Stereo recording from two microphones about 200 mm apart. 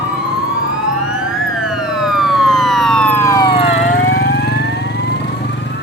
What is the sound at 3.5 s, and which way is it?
Vehicle, 30° left (ahead or behind).